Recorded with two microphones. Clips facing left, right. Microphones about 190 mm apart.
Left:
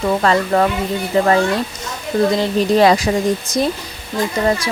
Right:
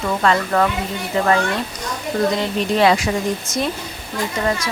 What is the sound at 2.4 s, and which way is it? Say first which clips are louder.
Speech: left 4 dB; 40° left (ahead or behind).